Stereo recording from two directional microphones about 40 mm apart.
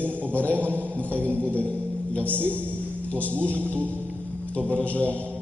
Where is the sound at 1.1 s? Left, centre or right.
Right.